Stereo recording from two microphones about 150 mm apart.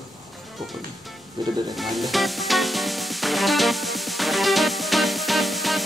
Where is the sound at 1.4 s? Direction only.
30° right (ahead or behind).